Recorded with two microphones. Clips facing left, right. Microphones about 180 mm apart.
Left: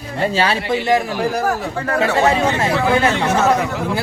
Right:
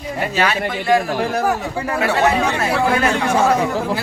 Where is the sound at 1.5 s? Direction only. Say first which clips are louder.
Even; 10° right (ahead or behind).